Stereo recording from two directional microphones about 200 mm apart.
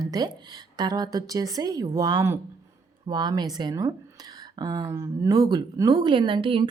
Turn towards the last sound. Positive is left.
turn(degrees=-25)  # may be behind; listen again after turning